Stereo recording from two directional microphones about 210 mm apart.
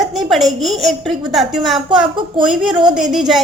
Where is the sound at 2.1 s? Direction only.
20° right (ahead or behind).